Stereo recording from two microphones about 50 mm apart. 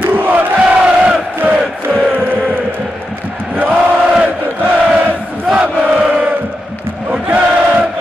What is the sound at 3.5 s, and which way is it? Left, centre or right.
Chant, right.